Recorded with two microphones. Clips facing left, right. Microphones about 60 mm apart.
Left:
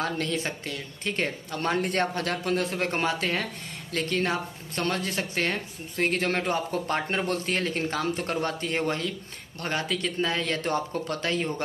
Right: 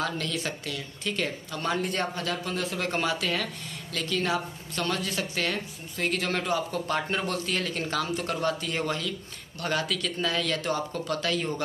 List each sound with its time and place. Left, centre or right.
0.0 s speech: left